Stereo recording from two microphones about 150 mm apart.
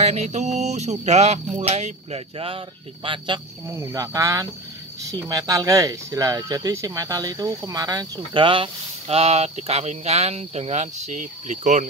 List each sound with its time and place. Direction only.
0.0 s speech: 50° right (ahead or behind)
3.6 s speech: 20° right (ahead or behind)
8.3 s speech: 35° right (ahead or behind); by 11.8 s 55° right (ahead or behind)